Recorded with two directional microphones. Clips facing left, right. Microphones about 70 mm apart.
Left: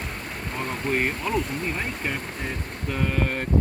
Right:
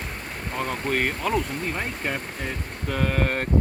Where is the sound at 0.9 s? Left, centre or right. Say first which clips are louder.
Right 1 dB; right.